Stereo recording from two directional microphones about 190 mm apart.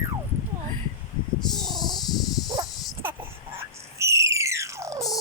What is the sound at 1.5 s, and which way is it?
Snake, centre (ahead or behind).